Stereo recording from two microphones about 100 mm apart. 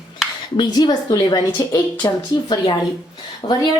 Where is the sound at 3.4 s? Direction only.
70° left (ahead or behind).